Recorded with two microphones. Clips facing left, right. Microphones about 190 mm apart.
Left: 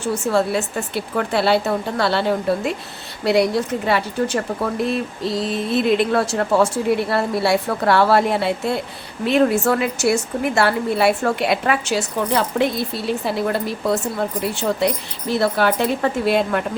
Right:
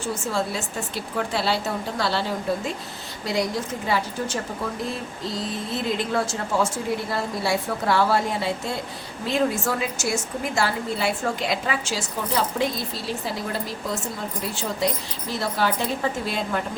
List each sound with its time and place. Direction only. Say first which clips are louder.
0.0 s speech: left 7 dB; 65° left (ahead or behind)